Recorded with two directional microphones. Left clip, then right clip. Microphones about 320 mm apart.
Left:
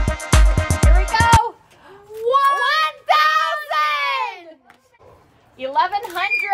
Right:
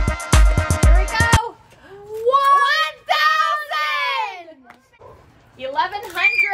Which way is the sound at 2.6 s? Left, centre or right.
Centre.